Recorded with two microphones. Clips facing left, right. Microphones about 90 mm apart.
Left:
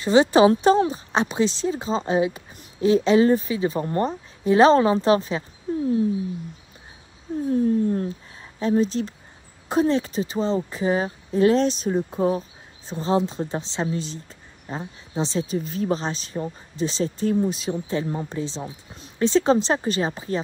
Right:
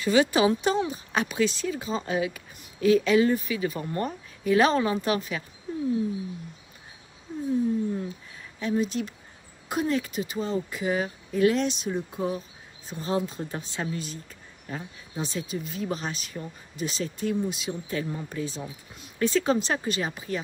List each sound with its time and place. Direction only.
0.0 s a woman's voice: 30° left (ahead or behind)
7.5 s speech: 55° left (ahead or behind)
8.4 s speech: 35° left (ahead or behind)
12.9 s a woman's voice: 25° left (ahead or behind)